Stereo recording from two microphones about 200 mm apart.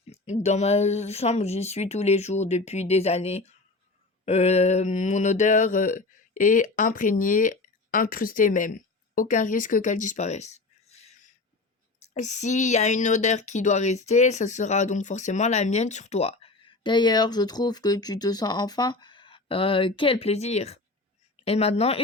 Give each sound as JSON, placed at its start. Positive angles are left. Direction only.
{"t": 0.1, "sound": "speech", "side_deg": 35}
{"t": 11.9, "sound": "speech", "side_deg": 35}